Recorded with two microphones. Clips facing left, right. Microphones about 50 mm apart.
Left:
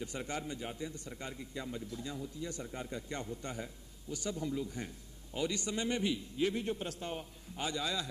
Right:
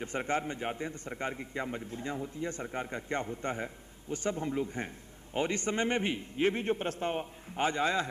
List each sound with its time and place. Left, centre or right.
0.0 s a man's voice: right